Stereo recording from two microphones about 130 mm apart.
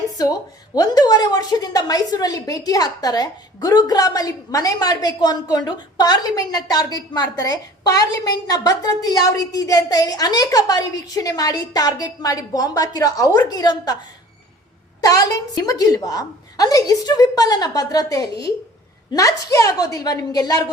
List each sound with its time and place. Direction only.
0.1 s a woman's voice: 30° left (ahead or behind)
15.0 s a woman's voice: 30° left (ahead or behind)